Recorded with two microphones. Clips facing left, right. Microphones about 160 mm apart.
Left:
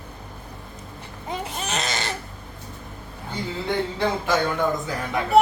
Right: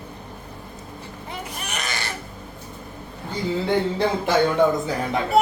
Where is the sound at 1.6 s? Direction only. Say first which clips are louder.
Left 3 dB; 20° left (ahead or behind).